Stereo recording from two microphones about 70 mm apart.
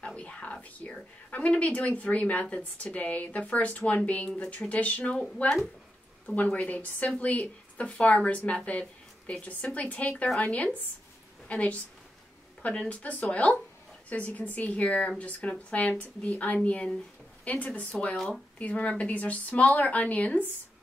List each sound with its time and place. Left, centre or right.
0.0 s a woman's voice: centre
6.2 s a woman's voice: left
18.1 s speech: centre
18.6 s a woman's voice: centre